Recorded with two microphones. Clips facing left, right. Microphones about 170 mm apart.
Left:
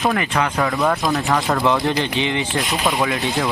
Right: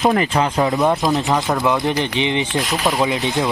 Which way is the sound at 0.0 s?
25° right (ahead or behind).